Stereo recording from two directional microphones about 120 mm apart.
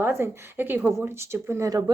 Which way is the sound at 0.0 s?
20° right (ahead or behind).